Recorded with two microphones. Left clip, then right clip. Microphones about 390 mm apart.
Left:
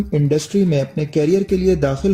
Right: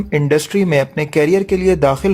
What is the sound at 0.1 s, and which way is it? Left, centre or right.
Speech, centre.